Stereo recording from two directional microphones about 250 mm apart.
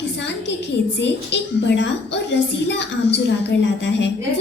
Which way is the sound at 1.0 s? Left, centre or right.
Left.